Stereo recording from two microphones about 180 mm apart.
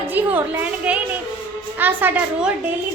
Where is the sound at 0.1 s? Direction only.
10° right (ahead or behind).